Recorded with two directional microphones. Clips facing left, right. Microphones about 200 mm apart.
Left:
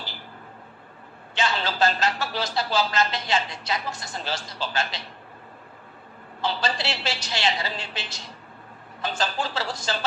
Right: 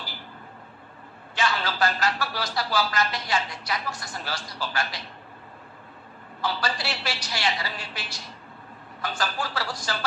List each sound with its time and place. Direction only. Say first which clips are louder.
1.4 s speech: left 2 dB; 25° left (ahead or behind)
6.4 s speech: left 2 dB; 25° left (ahead or behind)